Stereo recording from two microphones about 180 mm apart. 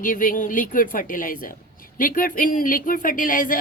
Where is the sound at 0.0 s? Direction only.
50° left (ahead or behind).